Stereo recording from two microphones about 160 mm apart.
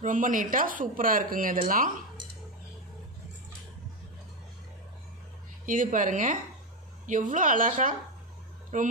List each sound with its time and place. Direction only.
0.0 s speech: 55° right (ahead or behind)
5.7 s speech: 55° right (ahead or behind)